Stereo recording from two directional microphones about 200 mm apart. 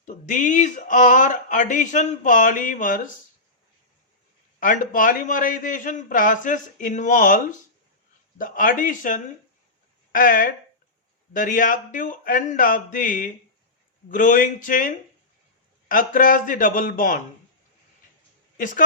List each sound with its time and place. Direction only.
0.0 s speech: 40° left (ahead or behind)
4.6 s a man's voice: 40° left (ahead or behind)
18.5 s a woman's voice: 40° left (ahead or behind)